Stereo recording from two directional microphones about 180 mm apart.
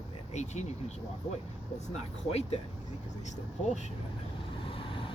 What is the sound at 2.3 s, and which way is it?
Speech, 35° left (ahead or behind).